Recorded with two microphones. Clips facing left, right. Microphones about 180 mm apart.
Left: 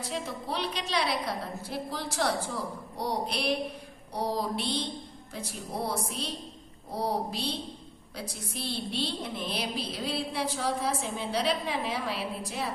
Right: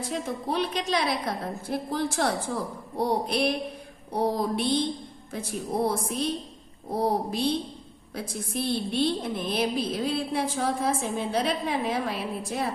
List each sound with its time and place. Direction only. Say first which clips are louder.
0.1 s a woman's voice: right 5 dB; 50° right (ahead or behind)